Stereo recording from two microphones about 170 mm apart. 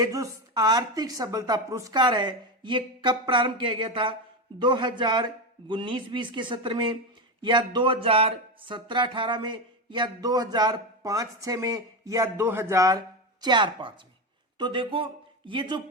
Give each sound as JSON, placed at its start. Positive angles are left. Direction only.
{"t": 0.0, "sound": "speech", "side_deg": -20}